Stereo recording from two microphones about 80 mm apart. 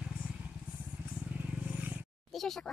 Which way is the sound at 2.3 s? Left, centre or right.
Centre.